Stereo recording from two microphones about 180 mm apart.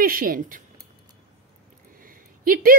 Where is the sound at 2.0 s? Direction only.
50° right (ahead or behind).